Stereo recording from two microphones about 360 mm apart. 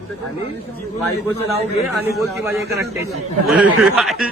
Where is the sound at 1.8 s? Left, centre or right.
Centre.